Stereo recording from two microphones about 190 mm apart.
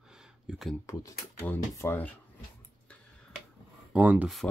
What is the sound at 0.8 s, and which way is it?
Speech, 15° left (ahead or behind).